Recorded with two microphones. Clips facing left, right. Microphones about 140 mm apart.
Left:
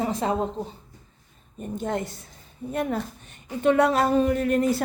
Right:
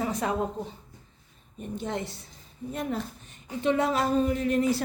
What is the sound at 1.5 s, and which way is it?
Speech, 45° left (ahead or behind).